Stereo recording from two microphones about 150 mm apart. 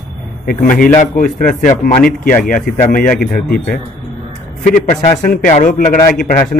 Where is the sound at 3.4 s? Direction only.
80° left.